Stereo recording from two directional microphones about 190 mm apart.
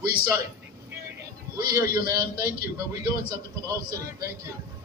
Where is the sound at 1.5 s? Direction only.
20° right (ahead or behind).